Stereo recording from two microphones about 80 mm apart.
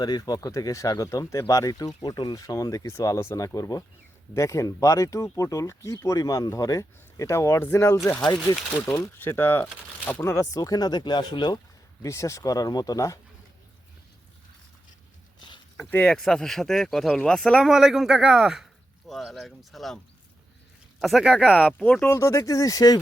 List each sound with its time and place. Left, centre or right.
0.0 s speech: left
9.1 s speech: left
12.0 s speech: left
15.4 s a sound: left
15.8 s speech: left
16.0 s speech: centre
17.7 s speech: centre
21.0 s speech: centre
22.1 s speech: left